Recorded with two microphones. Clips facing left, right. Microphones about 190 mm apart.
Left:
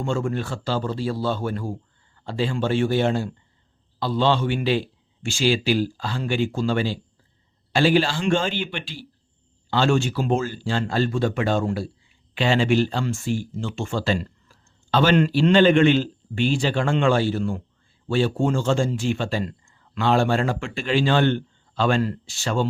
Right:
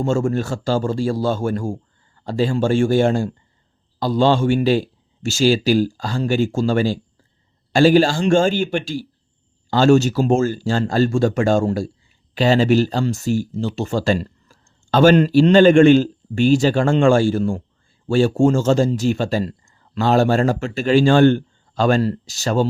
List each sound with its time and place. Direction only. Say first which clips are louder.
0.0 s a man's voice: right 6 dB; 40° right (ahead or behind)